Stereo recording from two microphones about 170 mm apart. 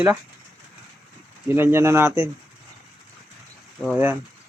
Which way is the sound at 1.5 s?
15° right (ahead or behind).